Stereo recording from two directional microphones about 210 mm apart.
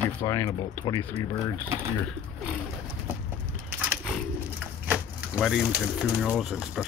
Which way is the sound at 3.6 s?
10° right (ahead or behind).